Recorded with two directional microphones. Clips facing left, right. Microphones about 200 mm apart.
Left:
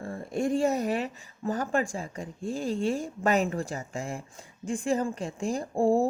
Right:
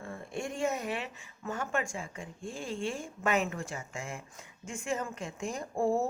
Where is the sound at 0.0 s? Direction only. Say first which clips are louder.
Left 8 dB; 40° left (ahead or behind).